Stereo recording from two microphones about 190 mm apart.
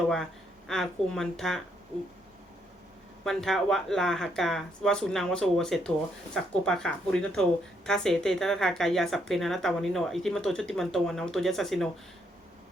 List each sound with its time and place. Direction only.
0.7 s speech: 5° left (ahead or behind)
3.2 s speech: centre (ahead or behind)